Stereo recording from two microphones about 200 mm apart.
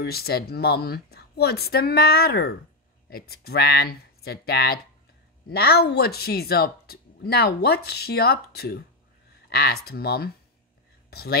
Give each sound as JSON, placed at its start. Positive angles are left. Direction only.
{"t": 0.0, "sound": "speech", "side_deg": 50}